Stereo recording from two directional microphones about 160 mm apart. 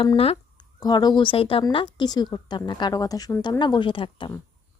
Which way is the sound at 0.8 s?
25° left (ahead or behind).